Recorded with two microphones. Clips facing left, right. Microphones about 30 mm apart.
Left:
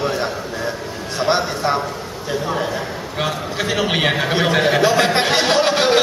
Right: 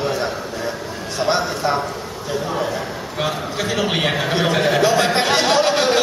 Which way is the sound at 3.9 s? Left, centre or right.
Centre.